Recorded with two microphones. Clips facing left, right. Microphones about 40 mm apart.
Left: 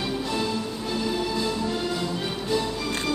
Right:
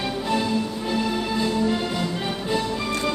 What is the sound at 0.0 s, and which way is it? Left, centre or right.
Music, right.